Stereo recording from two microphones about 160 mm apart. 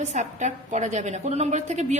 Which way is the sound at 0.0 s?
45° right (ahead or behind).